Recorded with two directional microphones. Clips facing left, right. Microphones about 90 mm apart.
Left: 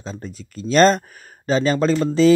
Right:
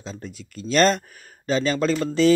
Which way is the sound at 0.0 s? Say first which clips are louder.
Left 3 dB; 40° left (ahead or behind).